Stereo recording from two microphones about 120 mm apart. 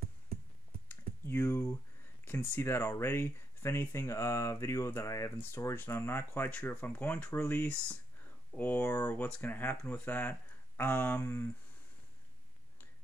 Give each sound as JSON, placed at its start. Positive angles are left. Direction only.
{"t": 0.8, "sound": "computer keyboard", "side_deg": 15}
{"t": 2.2, "sound": "speech", "side_deg": 15}